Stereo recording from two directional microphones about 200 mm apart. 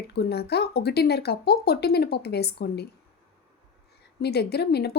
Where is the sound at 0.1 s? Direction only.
55° left (ahead or behind).